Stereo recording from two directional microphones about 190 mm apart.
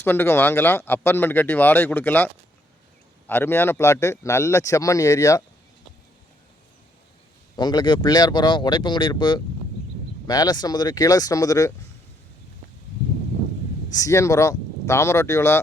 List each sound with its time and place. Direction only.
0.0 s speech: 10° left (ahead or behind)
7.5 s speech: 20° left (ahead or behind)
13.9 s speech: 15° left (ahead or behind)